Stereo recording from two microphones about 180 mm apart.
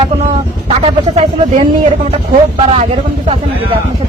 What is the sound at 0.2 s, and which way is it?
Speech, 35° right (ahead or behind).